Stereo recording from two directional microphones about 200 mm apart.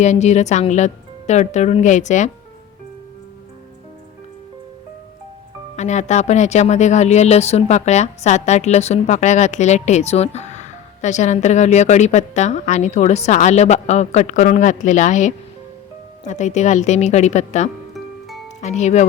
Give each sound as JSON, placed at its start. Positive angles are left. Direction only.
{"t": 0.0, "sound": "speech", "side_deg": 35}
{"t": 5.7, "sound": "speech", "side_deg": 35}
{"t": 17.9, "sound": "music", "side_deg": 0}
{"t": 18.6, "sound": "speech", "side_deg": 35}